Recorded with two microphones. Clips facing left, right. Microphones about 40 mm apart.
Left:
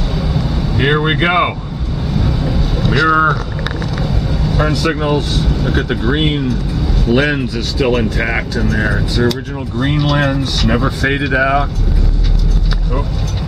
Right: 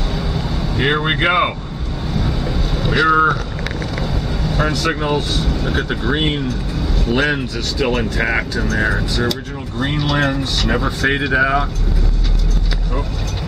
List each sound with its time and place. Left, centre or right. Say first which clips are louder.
0.3 s vehicle: left 3 dB; centre
3.1 s speech: left 1 dB; centre
4.0 s speech: left 4 dB; centre